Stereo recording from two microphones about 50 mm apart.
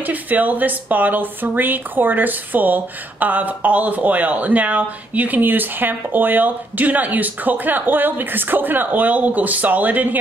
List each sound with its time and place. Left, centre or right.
0.0 s speech: right